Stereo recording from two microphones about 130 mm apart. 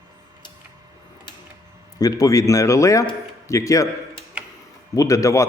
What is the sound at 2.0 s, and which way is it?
A man's voice, 25° left (ahead or behind).